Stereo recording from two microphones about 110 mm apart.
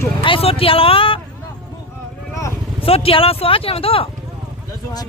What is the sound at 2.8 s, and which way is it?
Speech, 60° left (ahead or behind).